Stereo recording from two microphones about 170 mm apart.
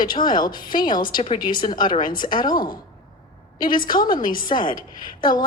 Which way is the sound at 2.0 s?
55° left (ahead or behind).